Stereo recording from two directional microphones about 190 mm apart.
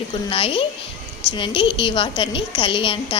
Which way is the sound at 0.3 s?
30° left (ahead or behind).